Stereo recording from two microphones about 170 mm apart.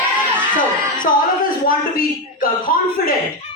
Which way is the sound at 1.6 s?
55° left (ahead or behind).